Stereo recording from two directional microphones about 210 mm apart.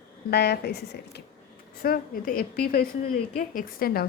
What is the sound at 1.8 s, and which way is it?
A woman's voice, 45° left (ahead or behind).